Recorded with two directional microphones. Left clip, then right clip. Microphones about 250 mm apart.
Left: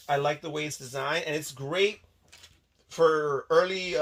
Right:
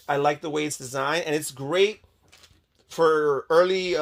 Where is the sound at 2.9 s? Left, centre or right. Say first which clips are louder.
Right 3 dB; right.